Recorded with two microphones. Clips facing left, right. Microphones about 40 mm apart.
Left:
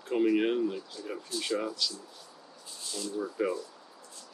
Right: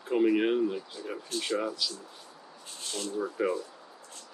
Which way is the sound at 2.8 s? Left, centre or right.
Right.